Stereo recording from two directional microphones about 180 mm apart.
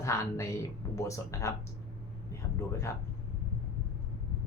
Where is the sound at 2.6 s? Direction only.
15° left (ahead or behind).